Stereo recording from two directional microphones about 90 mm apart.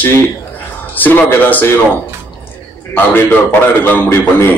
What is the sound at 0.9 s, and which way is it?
Speech, 20° left (ahead or behind).